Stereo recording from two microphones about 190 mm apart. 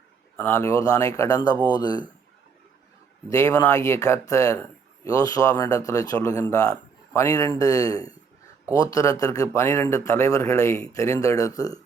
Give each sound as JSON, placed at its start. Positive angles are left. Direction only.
{"t": 0.3, "sound": "speech", "side_deg": 15}
{"t": 3.2, "sound": "speech", "side_deg": 15}